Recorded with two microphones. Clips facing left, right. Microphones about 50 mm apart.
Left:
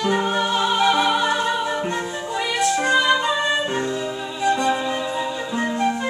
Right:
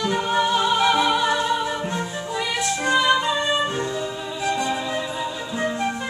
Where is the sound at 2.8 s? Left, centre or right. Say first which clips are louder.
Right 2 dB; centre.